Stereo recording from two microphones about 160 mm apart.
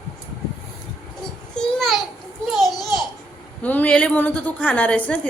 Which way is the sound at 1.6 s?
Centre (ahead or behind).